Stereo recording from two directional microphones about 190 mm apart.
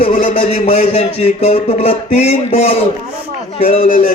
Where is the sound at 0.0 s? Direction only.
40° left (ahead or behind).